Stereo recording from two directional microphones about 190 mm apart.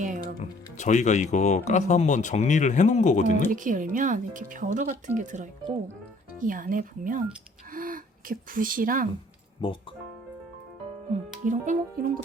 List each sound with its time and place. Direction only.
0.8 s speech: 40° left (ahead or behind)
3.5 s speech: 45° right (ahead or behind)
9.6 s speech: 25° left (ahead or behind)
11.1 s speech: 40° right (ahead or behind)